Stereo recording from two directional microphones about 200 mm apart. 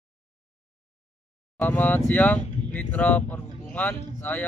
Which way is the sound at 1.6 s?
10° left (ahead or behind).